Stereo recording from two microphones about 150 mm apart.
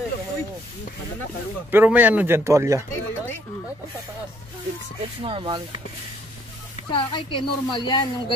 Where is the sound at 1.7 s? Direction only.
10° right (ahead or behind).